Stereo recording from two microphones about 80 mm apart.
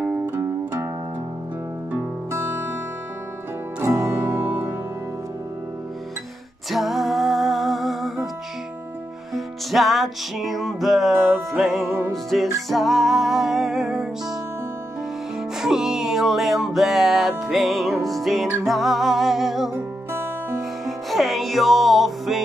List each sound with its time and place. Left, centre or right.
2.3 s music: right
3.8 s music: right
6.7 s music: centre
9.3 s music: centre
15.6 s music: centre
20.1 s music: right
20.8 s music: centre